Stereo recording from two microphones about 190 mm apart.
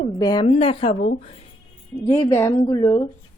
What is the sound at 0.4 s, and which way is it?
Speech, 30° left (ahead or behind).